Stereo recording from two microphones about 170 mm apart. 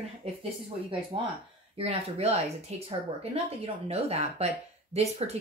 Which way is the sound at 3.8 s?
40° right (ahead or behind).